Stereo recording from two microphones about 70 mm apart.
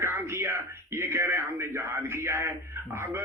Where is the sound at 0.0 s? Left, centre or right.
Right.